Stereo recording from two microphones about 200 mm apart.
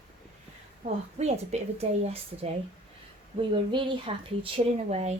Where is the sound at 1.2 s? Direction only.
35° right (ahead or behind).